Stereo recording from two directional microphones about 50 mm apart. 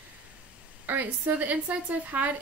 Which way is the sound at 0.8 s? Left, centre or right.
Right.